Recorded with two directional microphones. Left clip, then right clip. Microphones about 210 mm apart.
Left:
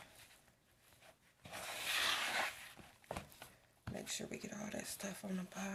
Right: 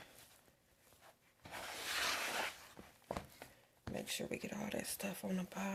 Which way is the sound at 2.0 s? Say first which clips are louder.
Left 2 dB; 25° right (ahead or behind).